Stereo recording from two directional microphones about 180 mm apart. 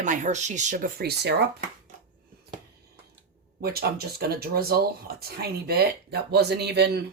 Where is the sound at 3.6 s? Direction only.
60° right (ahead or behind).